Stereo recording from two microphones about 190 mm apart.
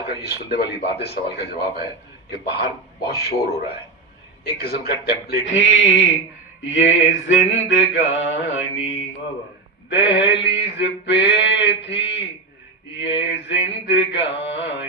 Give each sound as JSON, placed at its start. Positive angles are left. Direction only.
{"t": 0.1, "sound": "a man's voice", "side_deg": 60}
{"t": 4.6, "sound": "mantra", "side_deg": 55}
{"t": 9.8, "sound": "mantra", "side_deg": 70}
{"t": 13.3, "sound": "mantra", "side_deg": 70}